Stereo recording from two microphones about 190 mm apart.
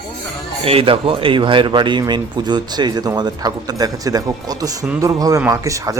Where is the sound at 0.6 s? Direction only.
30° right (ahead or behind).